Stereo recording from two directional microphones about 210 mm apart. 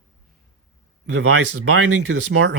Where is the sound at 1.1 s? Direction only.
90° right.